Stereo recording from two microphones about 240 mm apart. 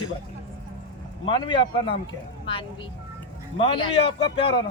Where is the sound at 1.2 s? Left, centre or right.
Centre.